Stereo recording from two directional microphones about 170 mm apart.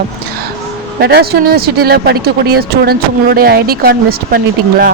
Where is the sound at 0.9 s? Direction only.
65° right (ahead or behind).